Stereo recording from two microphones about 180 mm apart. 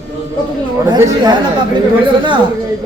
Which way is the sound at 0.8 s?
20° right (ahead or behind).